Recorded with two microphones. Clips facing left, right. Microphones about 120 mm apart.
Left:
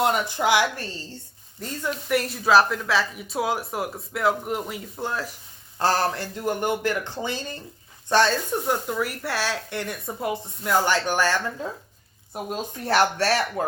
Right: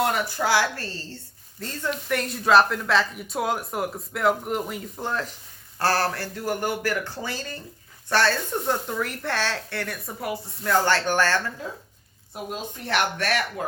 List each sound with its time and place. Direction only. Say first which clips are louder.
0.0 s speech: left 2 dB; 20° left (ahead or behind); by 5.3 s 5° left (ahead or behind)
5.8 s speech: left 1 dB; 20° left (ahead or behind)
8.9 s speech: left 1 dB; 5° left (ahead or behind)
12.8 s speech: left 5 dB; 35° left (ahead or behind)